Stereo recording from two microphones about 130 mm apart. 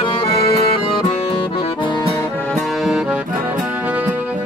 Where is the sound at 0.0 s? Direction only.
45° left (ahead or behind).